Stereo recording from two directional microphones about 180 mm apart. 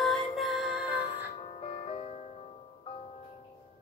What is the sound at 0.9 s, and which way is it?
Music, 35° left (ahead or behind).